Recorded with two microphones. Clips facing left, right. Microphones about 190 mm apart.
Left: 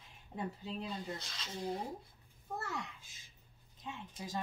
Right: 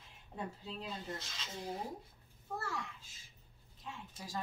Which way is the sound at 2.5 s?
20° left (ahead or behind).